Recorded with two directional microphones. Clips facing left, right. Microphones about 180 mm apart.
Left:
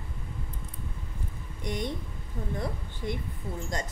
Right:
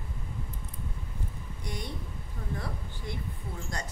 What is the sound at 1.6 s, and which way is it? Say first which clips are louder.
Speech: left 7 dB; 20° left (ahead or behind).